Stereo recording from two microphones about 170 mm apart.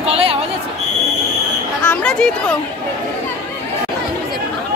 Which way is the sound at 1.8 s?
10° left (ahead or behind).